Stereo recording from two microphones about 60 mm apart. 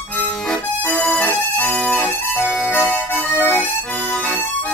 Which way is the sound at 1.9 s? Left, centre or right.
Left.